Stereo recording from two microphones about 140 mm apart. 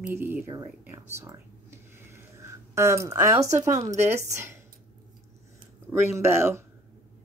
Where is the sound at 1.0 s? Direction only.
20° right (ahead or behind).